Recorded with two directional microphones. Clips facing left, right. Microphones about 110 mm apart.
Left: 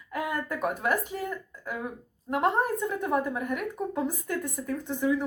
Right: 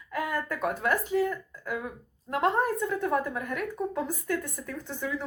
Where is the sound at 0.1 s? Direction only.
15° left (ahead or behind).